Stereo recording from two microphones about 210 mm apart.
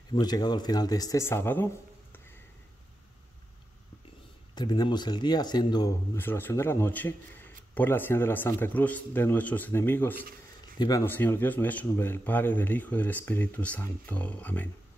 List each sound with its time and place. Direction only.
0.1 s speech: 20° left (ahead or behind)
4.6 s speech: 20° left (ahead or behind)